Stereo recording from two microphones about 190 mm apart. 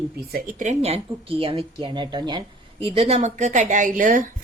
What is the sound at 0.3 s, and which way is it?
A woman's voice, 45° right (ahead or behind).